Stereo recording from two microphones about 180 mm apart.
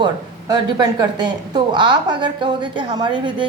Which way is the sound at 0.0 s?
25° right (ahead or behind).